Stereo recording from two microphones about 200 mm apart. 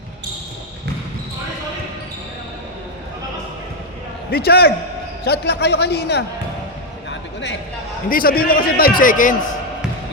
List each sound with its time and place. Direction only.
4.3 s a man's voice: 50° left (ahead or behind)
8.1 s a man's voice: 45° left (ahead or behind)